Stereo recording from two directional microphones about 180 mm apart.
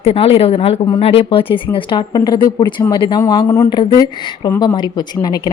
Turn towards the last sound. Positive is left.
turn(degrees=20)  # may be behind; listen again after turning